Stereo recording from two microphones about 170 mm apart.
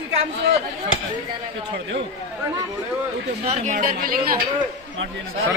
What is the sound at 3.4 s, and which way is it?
Speech, 40° right (ahead or behind).